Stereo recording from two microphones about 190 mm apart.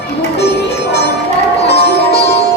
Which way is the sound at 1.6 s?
60° left (ahead or behind).